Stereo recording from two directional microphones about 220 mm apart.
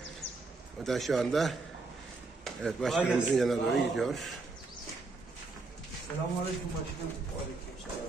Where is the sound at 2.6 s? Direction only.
Centre (ahead or behind).